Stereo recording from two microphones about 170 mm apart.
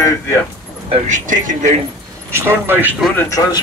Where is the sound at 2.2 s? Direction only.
15° right (ahead or behind).